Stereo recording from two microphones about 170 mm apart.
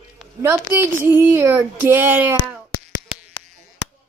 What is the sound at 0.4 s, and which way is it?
A child's voice, 15° right (ahead or behind).